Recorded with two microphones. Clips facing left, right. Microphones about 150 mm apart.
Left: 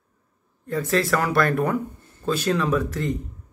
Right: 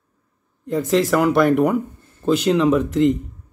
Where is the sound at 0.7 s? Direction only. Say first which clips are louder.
Right 4 dB; 20° right (ahead or behind).